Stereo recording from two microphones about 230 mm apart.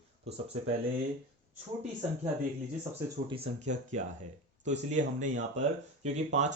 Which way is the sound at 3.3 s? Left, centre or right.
Right.